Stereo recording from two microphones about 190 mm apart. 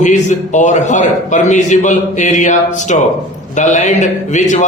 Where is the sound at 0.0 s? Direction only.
40° left (ahead or behind).